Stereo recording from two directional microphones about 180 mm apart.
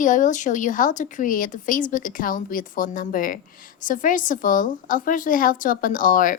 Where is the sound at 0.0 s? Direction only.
45° left (ahead or behind).